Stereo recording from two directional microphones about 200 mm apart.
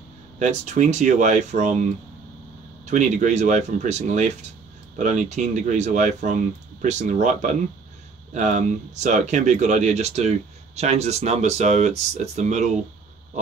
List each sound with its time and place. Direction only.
0.4 s speech: 35° right (ahead or behind)
2.9 s speech: 35° right (ahead or behind)